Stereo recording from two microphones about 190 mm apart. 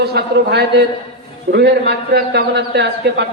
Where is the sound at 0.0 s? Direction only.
60° right (ahead or behind).